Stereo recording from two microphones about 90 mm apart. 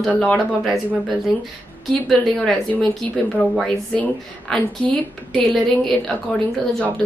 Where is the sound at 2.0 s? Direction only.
5° left (ahead or behind).